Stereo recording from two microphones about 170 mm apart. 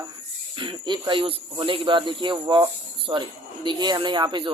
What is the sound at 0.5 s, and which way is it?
Speech, 30° right (ahead or behind).